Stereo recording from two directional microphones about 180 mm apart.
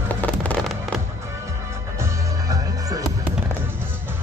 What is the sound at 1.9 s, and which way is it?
Music, 15° right (ahead or behind).